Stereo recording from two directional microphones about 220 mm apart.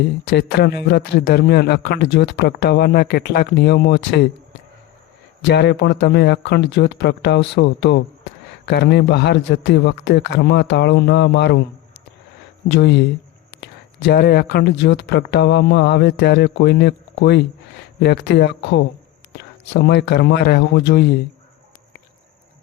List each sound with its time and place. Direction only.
0.3 s a man's voice: 50° left (ahead or behind)
5.5 s a man's voice: 50° left (ahead or behind)
12.7 s a man's voice: 50° left (ahead or behind)